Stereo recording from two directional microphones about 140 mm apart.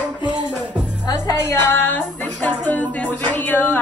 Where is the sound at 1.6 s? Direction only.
15° left (ahead or behind).